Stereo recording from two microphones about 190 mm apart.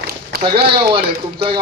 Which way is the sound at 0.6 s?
25° right (ahead or behind).